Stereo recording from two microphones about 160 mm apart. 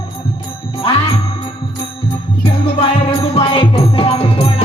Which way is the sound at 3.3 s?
35° left (ahead or behind).